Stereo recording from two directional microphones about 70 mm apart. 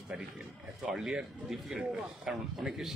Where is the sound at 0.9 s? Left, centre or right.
Centre.